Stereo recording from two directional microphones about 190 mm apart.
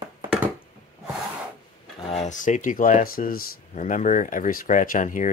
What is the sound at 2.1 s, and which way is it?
Speech, 40° left (ahead or behind).